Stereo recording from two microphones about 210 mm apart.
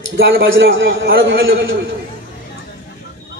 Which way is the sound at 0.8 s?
45° right (ahead or behind).